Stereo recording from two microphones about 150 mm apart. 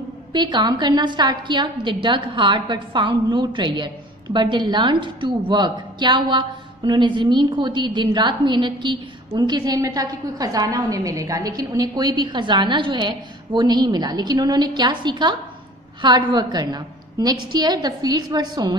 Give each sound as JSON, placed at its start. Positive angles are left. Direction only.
{"t": 0.3, "sound": "a woman's voice", "side_deg": -30}